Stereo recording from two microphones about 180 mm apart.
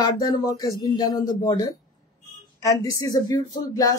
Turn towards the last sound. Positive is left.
turn(degrees=20)  # may be behind; listen again after turning